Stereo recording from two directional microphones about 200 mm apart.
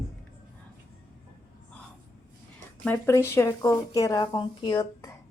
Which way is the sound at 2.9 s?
15° left (ahead or behind).